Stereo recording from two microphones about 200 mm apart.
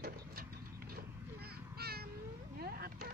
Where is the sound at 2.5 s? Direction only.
50° right (ahead or behind).